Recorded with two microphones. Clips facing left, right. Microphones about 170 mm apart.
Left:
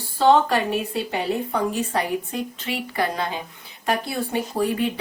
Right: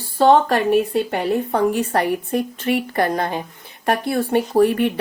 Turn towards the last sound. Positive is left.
turn(degrees=-65)  # may be behind; listen again after turning